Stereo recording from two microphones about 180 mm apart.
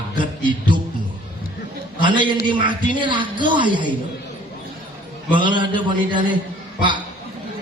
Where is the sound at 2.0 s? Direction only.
25° right (ahead or behind).